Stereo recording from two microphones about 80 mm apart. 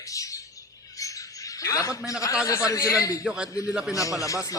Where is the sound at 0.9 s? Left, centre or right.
Left.